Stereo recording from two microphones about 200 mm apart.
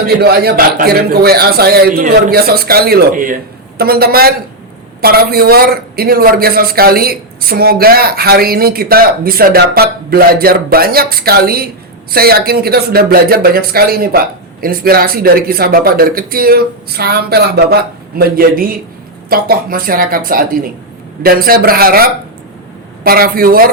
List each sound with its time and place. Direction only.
0.2 s a man's voice: 50° right (ahead or behind)